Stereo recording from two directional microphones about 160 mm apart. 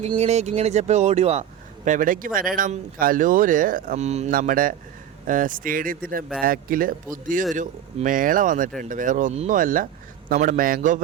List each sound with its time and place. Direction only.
0.2 s speech: 45° right (ahead or behind)
4.3 s speech: 60° right (ahead or behind)
9.6 s speech: 60° right (ahead or behind)